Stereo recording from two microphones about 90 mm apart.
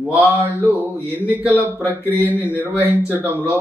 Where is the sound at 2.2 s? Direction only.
20° right (ahead or behind).